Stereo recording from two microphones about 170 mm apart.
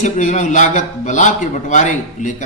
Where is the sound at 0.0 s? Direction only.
45° left (ahead or behind).